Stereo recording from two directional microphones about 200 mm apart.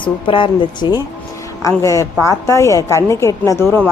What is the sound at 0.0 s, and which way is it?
A woman's voice, 25° left (ahead or behind).